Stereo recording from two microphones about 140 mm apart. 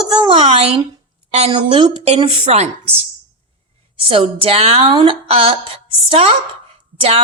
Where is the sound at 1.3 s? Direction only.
40° right (ahead or behind).